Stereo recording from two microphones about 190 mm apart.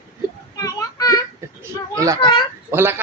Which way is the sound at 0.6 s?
20° left (ahead or behind).